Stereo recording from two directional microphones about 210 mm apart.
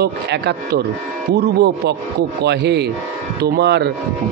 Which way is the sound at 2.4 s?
55° right (ahead or behind).